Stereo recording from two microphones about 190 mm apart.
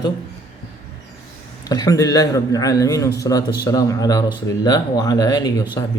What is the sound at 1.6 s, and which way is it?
A man's voice, 20° left (ahead or behind).